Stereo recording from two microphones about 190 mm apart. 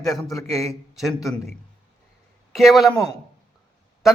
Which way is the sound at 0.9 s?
Centre (ahead or behind).